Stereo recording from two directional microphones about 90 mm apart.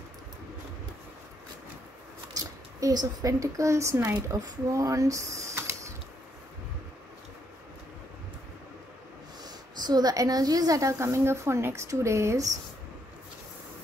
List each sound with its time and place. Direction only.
2.3 s a woman's voice: 45° right (ahead or behind)
9.4 s a woman's voice: 50° right (ahead or behind); by 12.4 s 30° right (ahead or behind)